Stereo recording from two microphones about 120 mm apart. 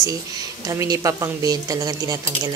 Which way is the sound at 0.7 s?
30° right (ahead or behind).